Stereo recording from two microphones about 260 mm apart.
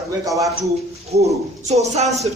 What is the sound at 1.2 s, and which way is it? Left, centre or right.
Speech, right.